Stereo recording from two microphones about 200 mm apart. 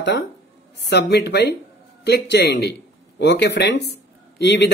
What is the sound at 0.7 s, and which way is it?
Speech, 55° left (ahead or behind).